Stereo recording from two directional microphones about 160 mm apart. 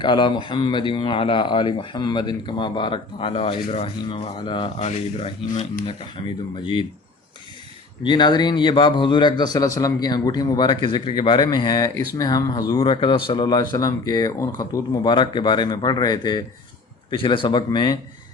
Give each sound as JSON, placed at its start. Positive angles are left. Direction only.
{"t": 0.0, "sound": "a man's voice", "side_deg": 30}
{"t": 4.8, "sound": "speech", "side_deg": 45}
{"t": 8.0, "sound": "a man's voice", "side_deg": 30}